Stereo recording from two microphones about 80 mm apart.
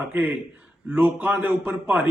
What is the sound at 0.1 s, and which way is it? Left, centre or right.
A man's voice, right.